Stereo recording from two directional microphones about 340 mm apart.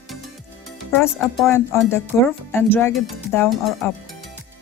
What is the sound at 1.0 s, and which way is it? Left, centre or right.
Speech, centre.